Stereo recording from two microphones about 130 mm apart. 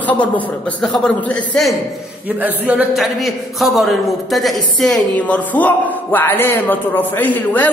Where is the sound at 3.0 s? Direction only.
Centre (ahead or behind).